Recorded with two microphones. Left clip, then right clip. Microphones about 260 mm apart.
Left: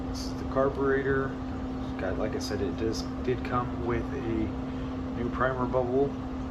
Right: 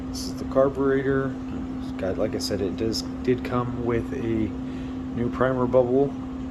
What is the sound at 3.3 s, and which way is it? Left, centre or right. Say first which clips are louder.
Speech: right 5 dB; right.